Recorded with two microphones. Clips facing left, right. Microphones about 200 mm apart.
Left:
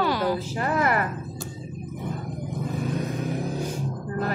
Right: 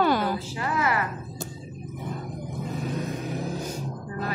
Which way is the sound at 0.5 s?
50° left (ahead or behind).